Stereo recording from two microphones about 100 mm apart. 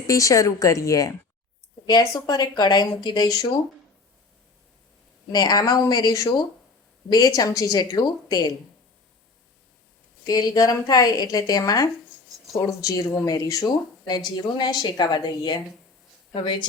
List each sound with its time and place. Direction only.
0.1 s a woman's voice: 35° left (ahead or behind)
5.3 s a woman's voice: 40° left (ahead or behind)
10.2 s a woman's voice: 40° left (ahead or behind)